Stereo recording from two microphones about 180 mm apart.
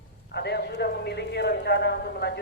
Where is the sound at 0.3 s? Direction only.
65° left (ahead or behind).